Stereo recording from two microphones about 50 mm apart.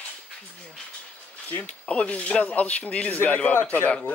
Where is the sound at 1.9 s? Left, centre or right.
Left.